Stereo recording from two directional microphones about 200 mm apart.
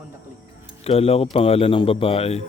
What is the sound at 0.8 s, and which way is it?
Speech, 30° left (ahead or behind).